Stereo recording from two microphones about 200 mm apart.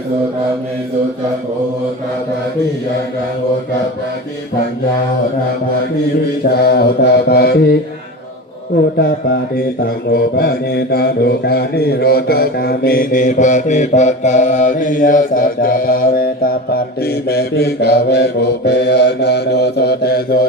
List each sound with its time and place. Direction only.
6.6 s mantra: 50° left (ahead or behind)
9.0 s mantra: 50° left (ahead or behind)